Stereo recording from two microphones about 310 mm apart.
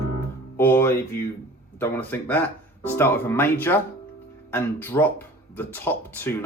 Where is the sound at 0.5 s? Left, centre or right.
Centre.